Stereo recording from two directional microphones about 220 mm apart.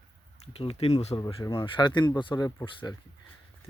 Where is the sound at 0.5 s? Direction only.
30° left (ahead or behind).